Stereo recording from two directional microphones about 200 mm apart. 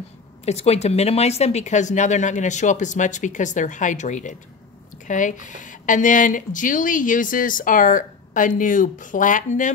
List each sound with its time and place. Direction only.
0.5 s speech: 30° left (ahead or behind)